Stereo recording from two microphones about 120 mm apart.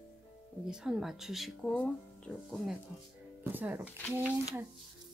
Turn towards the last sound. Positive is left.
turn(degrees=-15)  # may be behind; listen again after turning